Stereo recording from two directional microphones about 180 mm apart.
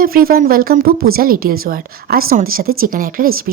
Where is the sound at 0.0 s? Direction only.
55° right (ahead or behind).